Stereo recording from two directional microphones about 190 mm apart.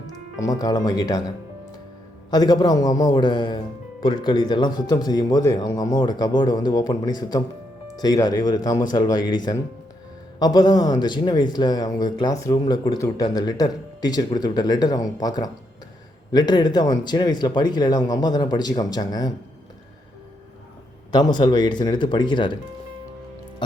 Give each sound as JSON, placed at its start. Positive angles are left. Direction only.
{"t": 0.3, "sound": "speech", "side_deg": 20}
{"t": 2.3, "sound": "speech", "side_deg": 20}
{"t": 21.1, "sound": "speech", "side_deg": 20}